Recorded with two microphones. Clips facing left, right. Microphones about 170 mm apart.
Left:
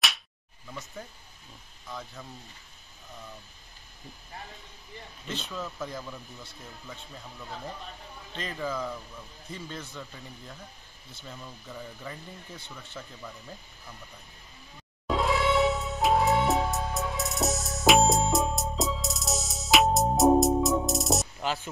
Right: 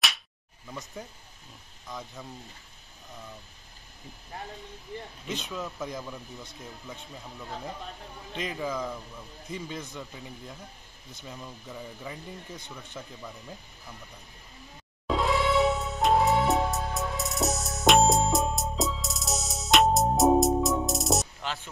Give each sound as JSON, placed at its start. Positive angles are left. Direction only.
{"t": 0.7, "sound": "speech", "side_deg": -15}
{"t": 5.2, "sound": "speech", "side_deg": -15}
{"t": 6.0, "sound": "speech", "side_deg": -5}
{"t": 6.4, "sound": "speech", "side_deg": -15}
{"t": 10.1, "sound": "speech", "side_deg": -5}
{"t": 15.0, "sound": "music", "side_deg": 0}